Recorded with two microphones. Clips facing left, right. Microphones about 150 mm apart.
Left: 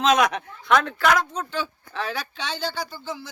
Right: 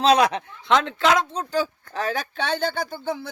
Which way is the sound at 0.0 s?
30° right (ahead or behind).